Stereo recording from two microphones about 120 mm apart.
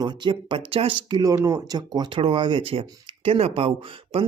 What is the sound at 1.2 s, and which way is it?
Speech, 30° right (ahead or behind).